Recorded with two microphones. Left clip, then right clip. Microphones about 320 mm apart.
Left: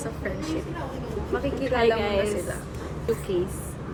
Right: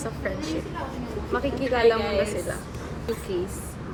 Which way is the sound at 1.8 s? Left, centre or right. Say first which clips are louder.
Right 2 dB; left.